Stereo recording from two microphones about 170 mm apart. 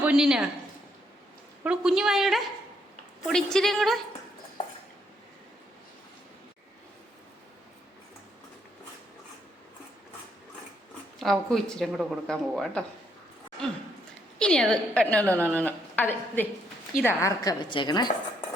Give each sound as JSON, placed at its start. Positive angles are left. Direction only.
{"t": 0.0, "sound": "speech", "side_deg": -5}
{"t": 1.6, "sound": "speech", "side_deg": -5}
{"t": 11.2, "sound": "speech", "side_deg": 0}
{"t": 14.3, "sound": "a woman's voice", "side_deg": 5}